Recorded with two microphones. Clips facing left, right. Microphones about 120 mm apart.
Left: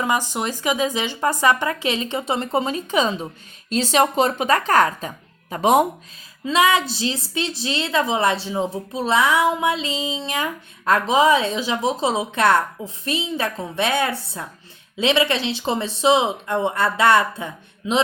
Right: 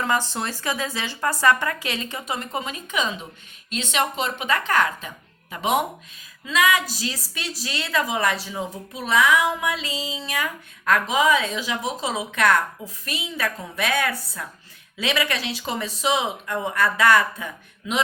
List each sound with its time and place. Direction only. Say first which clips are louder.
0.0 s a woman's voice: left 2 dB; 15° left (ahead or behind); by 5.8 s 40° left (ahead or behind)
6.4 s a woman's voice: left 4 dB; 30° left (ahead or behind)